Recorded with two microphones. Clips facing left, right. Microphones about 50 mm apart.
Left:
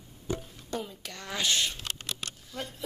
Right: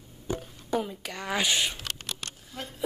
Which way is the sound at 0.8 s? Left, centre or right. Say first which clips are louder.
Right 6 dB; centre.